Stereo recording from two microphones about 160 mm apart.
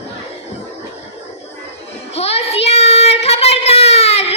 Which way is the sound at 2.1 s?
40° left (ahead or behind).